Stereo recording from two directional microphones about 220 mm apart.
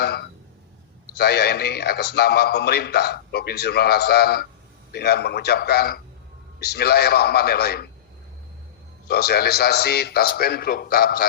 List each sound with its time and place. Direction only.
0.0 s a man's voice: 45° left (ahead or behind)
9.0 s a man's voice: 45° left (ahead or behind)